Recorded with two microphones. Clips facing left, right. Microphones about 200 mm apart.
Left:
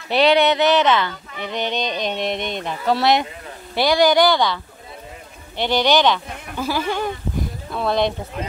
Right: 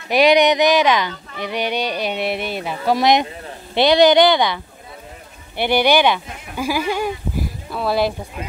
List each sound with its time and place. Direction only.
0.1 s speech: 15° right (ahead or behind)
5.6 s speech: 10° right (ahead or behind)